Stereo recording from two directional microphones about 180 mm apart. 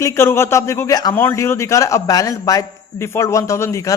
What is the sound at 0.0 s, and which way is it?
A man's voice, 15° left (ahead or behind).